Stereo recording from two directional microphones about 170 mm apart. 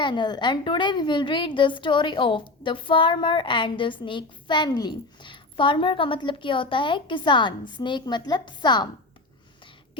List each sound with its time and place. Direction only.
0.0 s a woman's voice: 25° left (ahead or behind)